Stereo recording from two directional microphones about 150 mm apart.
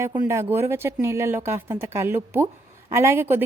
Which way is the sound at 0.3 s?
15° right (ahead or behind).